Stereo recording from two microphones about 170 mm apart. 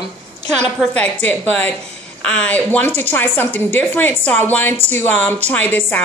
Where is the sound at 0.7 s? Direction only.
5° left (ahead or behind).